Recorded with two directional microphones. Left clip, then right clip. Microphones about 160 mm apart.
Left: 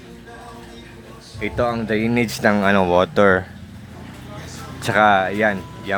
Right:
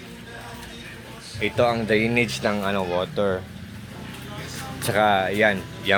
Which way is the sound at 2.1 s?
50° left (ahead or behind).